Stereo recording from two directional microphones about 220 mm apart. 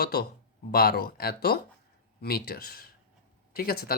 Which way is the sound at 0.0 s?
45° left (ahead or behind).